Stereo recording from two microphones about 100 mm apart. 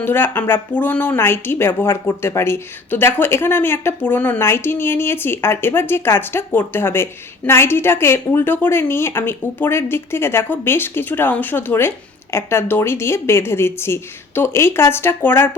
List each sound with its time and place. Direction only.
0.0 s a woman's voice: 20° left (ahead or behind)